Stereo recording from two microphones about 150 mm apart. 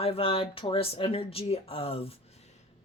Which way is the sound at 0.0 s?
40° left (ahead or behind).